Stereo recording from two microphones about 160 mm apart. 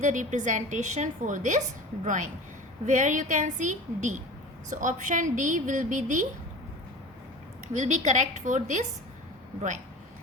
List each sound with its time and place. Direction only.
0.0 s a woman's voice: 50° right (ahead or behind)
7.7 s a woman's voice: 50° right (ahead or behind)